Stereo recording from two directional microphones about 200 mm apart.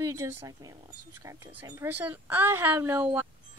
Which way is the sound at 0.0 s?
15° right (ahead or behind).